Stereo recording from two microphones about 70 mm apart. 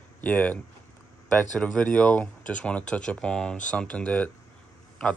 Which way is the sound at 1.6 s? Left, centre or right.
Centre.